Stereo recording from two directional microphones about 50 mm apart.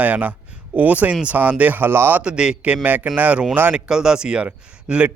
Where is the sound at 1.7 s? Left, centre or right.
Right.